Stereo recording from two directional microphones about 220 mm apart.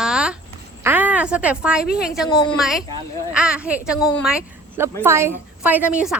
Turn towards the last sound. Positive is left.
turn(degrees=-5)  # may be behind; listen again after turning